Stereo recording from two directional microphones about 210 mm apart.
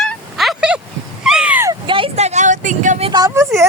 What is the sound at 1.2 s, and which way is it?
Speech, 5° right (ahead or behind).